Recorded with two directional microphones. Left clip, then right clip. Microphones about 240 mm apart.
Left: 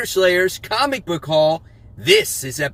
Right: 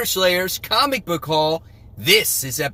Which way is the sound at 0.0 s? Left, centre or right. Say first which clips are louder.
Left 3 dB; centre.